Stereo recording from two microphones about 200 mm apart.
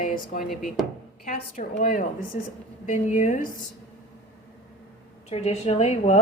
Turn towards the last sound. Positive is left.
turn(degrees=35)  # may be behind; listen again after turning